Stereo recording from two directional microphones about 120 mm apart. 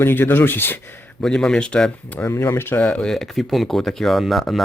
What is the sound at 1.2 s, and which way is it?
Speech, 5° left (ahead or behind).